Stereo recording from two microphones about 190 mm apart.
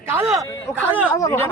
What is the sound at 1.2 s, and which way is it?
Speech, 15° left (ahead or behind).